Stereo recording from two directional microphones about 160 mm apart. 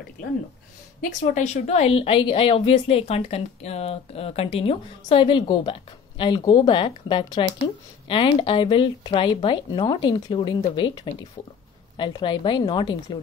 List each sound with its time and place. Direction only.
1.3 s a woman's voice: 45° left (ahead or behind)